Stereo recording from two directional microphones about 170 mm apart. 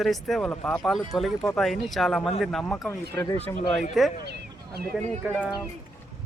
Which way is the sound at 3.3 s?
40° left (ahead or behind).